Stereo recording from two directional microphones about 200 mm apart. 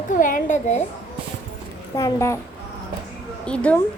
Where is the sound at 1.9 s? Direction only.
15° left (ahead or behind).